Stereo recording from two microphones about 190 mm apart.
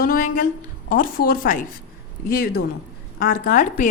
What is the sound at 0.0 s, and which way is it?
A woman's voice, 50° left (ahead or behind).